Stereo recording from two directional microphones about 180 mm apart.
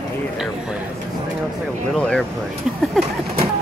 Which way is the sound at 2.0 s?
5° left (ahead or behind).